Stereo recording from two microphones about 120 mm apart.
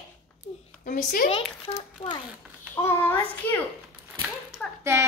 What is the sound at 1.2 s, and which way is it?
Speech, 55° left (ahead or behind).